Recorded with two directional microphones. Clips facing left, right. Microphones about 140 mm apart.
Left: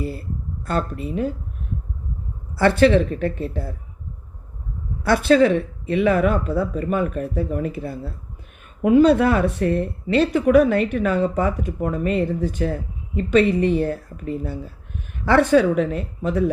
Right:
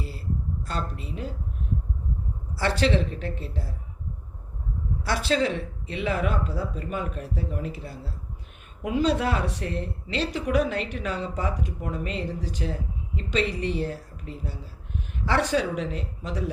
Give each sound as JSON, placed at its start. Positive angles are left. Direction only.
{"t": 0.0, "sound": "speech", "side_deg": 55}
{"t": 2.6, "sound": "speech", "side_deg": 55}
{"t": 5.0, "sound": "speech", "side_deg": 55}